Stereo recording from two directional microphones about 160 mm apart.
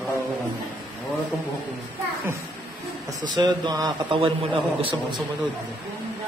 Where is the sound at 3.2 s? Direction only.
25° right (ahead or behind).